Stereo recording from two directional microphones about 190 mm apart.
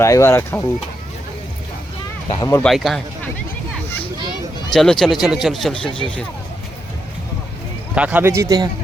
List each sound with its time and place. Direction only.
0.0 s speech: 15° left (ahead or behind)
2.3 s speech: 20° left (ahead or behind)
2.6 s speech: centre (ahead or behind)
4.7 s speech: centre (ahead or behind)
7.9 s speech: 10° right (ahead or behind)